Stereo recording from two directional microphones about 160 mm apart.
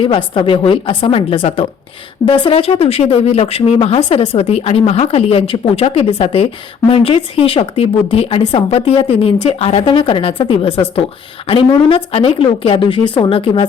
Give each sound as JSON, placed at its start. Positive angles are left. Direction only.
{"t": 0.0, "sound": "speech", "side_deg": 30}